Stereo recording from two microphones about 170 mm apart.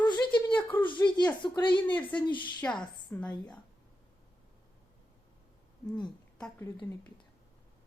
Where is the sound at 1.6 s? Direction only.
25° left (ahead or behind).